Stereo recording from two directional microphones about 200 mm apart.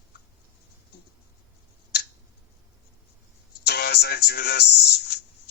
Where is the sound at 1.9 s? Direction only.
55° left (ahead or behind).